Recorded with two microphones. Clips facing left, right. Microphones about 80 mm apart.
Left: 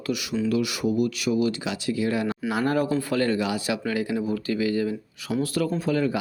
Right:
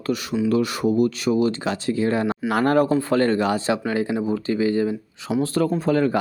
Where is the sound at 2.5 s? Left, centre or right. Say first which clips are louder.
Right 5 dB; right.